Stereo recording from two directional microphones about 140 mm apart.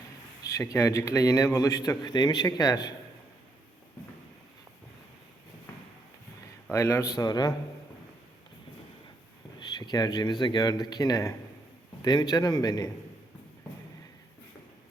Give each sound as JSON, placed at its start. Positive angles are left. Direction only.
{"t": 0.4, "sound": "a man's voice", "side_deg": 20}
{"t": 6.7, "sound": "a man's voice", "side_deg": 20}
{"t": 9.6, "sound": "a man's voice", "side_deg": 30}